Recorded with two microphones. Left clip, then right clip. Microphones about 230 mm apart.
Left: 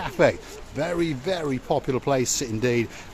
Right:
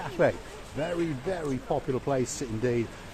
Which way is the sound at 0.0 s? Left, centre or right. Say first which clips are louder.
Left 5 dB; left.